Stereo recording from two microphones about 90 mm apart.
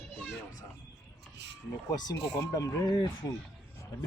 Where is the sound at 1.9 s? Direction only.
50° left (ahead or behind).